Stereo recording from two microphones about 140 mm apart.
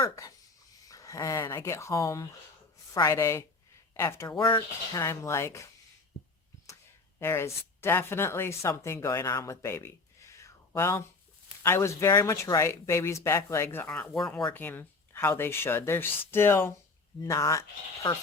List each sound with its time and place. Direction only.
0.9 s speech: 25° left (ahead or behind)
4.4 s speech: 35° left (ahead or behind)
4.9 s speech: 20° left (ahead or behind)
7.2 s speech: 20° left (ahead or behind)